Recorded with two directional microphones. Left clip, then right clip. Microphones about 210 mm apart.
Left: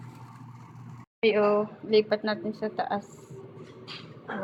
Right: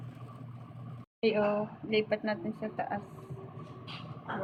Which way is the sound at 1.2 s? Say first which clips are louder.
Left 6 dB; 10° left (ahead or behind).